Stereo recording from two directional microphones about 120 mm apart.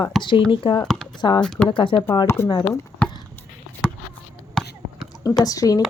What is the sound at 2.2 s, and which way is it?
Speech, 20° left (ahead or behind).